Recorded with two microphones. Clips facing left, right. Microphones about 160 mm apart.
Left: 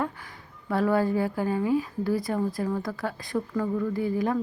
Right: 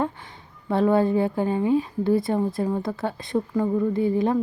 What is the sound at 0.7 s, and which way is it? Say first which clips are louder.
Speech: right 4 dB; 25° right (ahead or behind).